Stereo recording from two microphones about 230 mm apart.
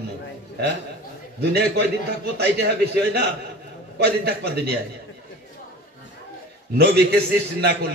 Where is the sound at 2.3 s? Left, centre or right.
Right.